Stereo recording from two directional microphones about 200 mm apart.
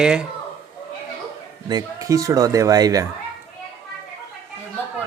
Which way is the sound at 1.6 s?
20° right (ahead or behind).